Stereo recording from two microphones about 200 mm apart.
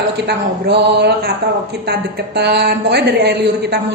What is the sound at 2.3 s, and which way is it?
A woman's voice, 55° right (ahead or behind).